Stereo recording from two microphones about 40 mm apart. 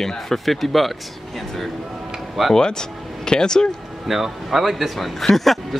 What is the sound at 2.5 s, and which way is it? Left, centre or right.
Speech, centre.